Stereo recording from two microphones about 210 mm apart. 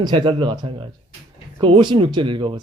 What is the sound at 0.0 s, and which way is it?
Speech, 20° right (ahead or behind).